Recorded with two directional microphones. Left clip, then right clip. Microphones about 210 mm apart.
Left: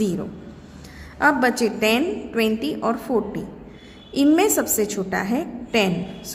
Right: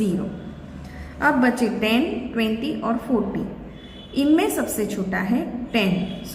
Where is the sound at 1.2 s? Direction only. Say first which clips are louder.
Left 1 dB; 55° left (ahead or behind).